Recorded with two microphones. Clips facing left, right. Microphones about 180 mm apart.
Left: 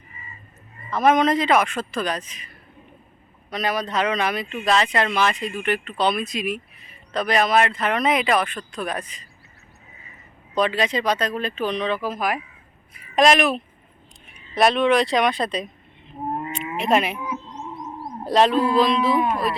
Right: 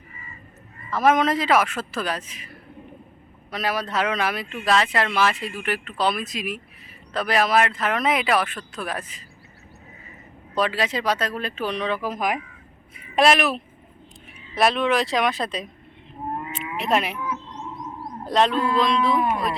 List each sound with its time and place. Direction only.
0.9 s speech: 5° right (ahead or behind)
3.5 s speech: 5° right (ahead or behind)
10.5 s speech: 5° right (ahead or behind)
13.1 s speech: 5° right (ahead or behind)
16.7 s speech: centre (ahead or behind)
17.2 s bird: 20° left (ahead or behind)
18.3 s speech: 5° left (ahead or behind)